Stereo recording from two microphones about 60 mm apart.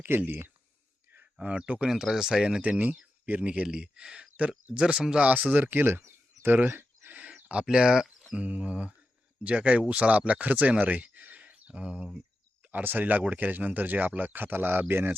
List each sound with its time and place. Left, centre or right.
0.0 s speech: right
1.4 s speech: centre
1.9 s speech: centre
2.6 s speech: right
5.3 s speech: right
6.7 s a sound: right; by 7.6 s centre
7.6 s speech: centre
8.3 s speech: right
12.6 s speech: right